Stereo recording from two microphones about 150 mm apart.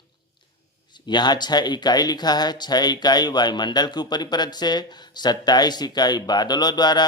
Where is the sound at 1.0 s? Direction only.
30° left (ahead or behind).